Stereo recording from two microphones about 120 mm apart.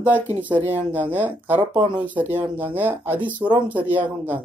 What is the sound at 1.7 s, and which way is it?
Speech, 40° right (ahead or behind).